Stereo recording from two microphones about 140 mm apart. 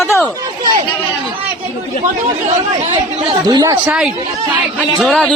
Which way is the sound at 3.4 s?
30° right (ahead or behind).